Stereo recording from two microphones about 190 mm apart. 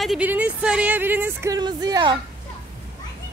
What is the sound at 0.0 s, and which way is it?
Speech, 5° right (ahead or behind).